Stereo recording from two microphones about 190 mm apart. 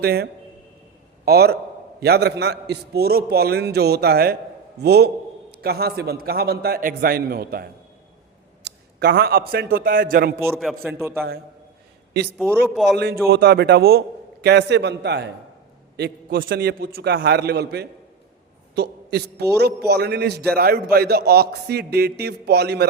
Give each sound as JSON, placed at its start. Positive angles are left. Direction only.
{"t": 0.0, "sound": "a man's voice", "side_deg": -55}
{"t": 10.4, "sound": "a man's voice", "side_deg": 0}
{"t": 12.7, "sound": "a man's voice", "side_deg": 0}
{"t": 13.0, "sound": "a man's voice", "side_deg": -55}